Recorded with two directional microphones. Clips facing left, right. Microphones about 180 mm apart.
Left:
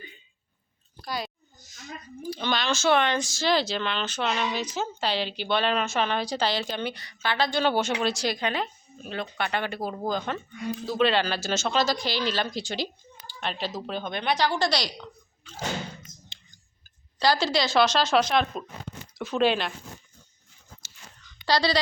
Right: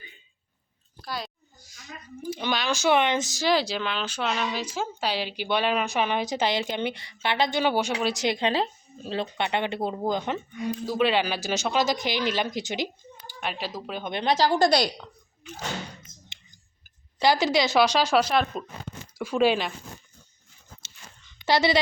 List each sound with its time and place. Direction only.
1.0 s a sound: centre (ahead or behind)
2.4 s speech: 10° right (ahead or behind)
14.1 s speech: 30° right (ahead or behind)
14.6 s a woman's voice: 50° right (ahead or behind)
17.2 s speech: 20° right (ahead or behind)
21.2 s a sound: 20° right (ahead or behind)